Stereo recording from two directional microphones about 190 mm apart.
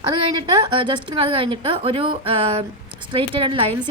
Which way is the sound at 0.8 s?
30° right (ahead or behind).